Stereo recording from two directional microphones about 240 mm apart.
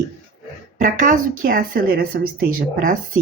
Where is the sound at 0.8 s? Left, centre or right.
Right.